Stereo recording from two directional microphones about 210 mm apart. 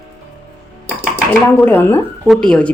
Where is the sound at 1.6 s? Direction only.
10° left (ahead or behind).